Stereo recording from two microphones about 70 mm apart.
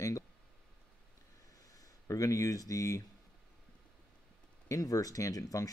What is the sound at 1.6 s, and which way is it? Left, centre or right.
Speech, left.